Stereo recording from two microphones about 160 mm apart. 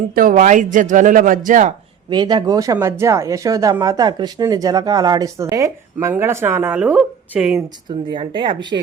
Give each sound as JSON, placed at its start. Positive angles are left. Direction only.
{"t": 0.1, "sound": "speech", "side_deg": -60}
{"t": 2.0, "sound": "speech", "side_deg": -25}
{"t": 7.9, "sound": "speech", "side_deg": -30}